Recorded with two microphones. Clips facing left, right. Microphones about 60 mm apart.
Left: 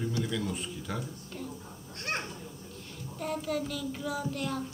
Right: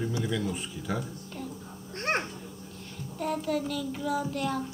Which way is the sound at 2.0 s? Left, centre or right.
Right.